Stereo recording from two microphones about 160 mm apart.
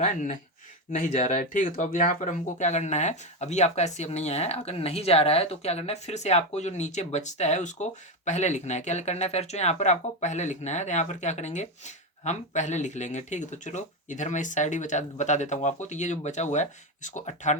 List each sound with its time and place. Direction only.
0.0 s speech: 50° left (ahead or behind)